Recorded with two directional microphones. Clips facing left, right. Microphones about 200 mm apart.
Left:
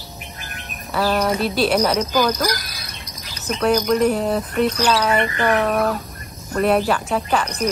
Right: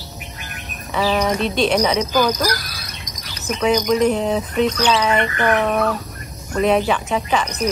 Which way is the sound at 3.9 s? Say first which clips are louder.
Right 1 dB; 5° left (ahead or behind).